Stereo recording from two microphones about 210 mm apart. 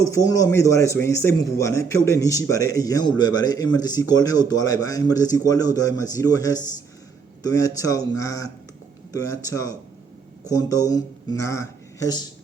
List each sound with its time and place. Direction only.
0.1 s a man's voice: 15° left (ahead or behind)
9.5 s a man's voice: 15° left (ahead or behind)